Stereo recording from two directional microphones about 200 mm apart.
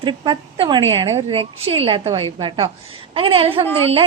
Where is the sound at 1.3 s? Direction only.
30° right (ahead or behind).